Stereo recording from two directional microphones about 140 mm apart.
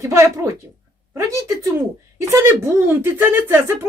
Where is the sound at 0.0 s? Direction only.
20° right (ahead or behind).